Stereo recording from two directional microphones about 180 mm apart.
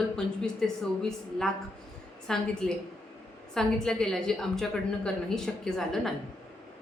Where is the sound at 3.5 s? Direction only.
5° left (ahead or behind).